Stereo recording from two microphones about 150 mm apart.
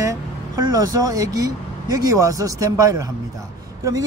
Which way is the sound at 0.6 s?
25° right (ahead or behind).